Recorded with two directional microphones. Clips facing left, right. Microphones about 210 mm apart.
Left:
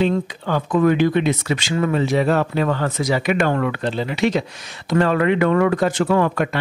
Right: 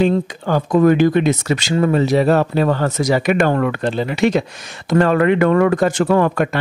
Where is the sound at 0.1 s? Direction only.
40° right (ahead or behind).